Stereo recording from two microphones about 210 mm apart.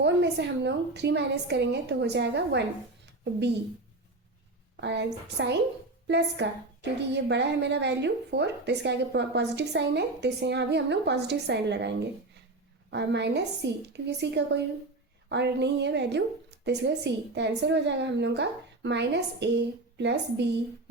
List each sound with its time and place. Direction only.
0.0 s a woman's voice: 55° right (ahead or behind)
4.8 s a woman's voice: 55° right (ahead or behind)